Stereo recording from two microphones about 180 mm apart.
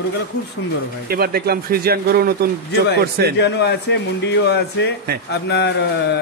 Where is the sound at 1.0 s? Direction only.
55° right (ahead or behind).